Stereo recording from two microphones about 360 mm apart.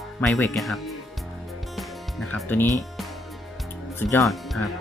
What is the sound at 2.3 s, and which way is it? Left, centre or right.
Speech, centre.